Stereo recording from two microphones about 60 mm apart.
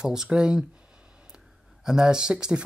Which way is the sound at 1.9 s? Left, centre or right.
Centre.